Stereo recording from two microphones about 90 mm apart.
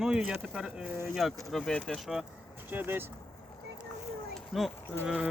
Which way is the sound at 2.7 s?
25° right (ahead or behind).